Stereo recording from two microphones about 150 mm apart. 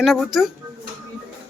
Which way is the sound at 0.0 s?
Centre (ahead or behind).